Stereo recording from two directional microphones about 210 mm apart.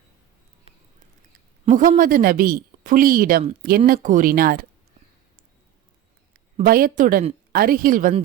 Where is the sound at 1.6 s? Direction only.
40° right (ahead or behind).